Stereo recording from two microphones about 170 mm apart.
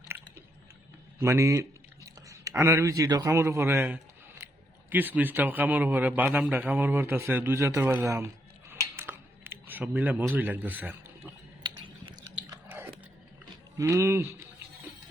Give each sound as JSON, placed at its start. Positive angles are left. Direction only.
{"t": 1.2, "sound": "a man's voice", "side_deg": -15}
{"t": 8.7, "sound": "scissors", "side_deg": -15}
{"t": 11.6, "sound": "typing", "side_deg": -25}
{"t": 12.5, "sound": "chewing", "side_deg": -15}
{"t": 13.7, "sound": "a man's voice", "side_deg": -15}